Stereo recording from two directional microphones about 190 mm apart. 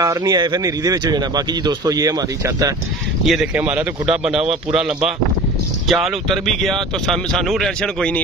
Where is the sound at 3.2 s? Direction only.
5° right (ahead or behind).